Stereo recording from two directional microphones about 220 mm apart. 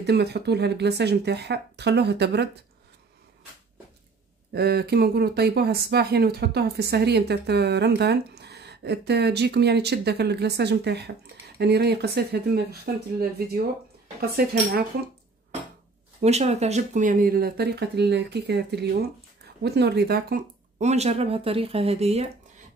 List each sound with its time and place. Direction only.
0.0 s speech: 50° right (ahead or behind)
4.6 s speech: 45° right (ahead or behind)
16.2 s speech: 30° right (ahead or behind)